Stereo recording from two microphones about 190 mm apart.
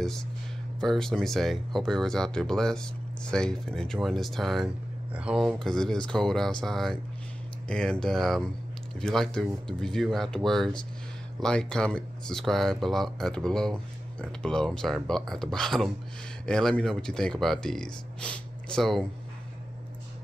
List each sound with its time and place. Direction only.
0.7 s speech: 5° left (ahead or behind)